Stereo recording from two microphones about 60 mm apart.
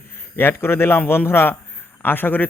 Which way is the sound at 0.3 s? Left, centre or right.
Left.